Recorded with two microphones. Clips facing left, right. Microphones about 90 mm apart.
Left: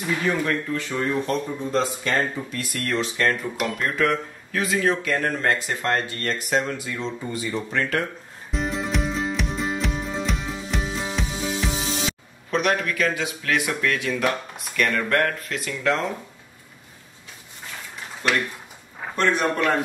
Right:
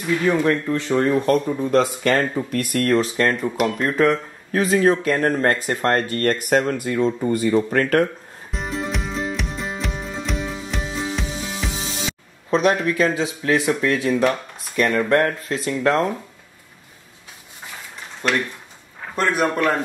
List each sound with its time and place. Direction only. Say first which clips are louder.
0.3 s speech: right 6 dB; 25° right (ahead or behind)
0.9 s speech: right 7 dB; 55° right (ahead or behind)
8.5 s music: even; centre (ahead or behind)
12.4 s speech: right 5 dB; 30° right (ahead or behind)
19.1 s a man's voice: right 2 dB; 5° right (ahead or behind)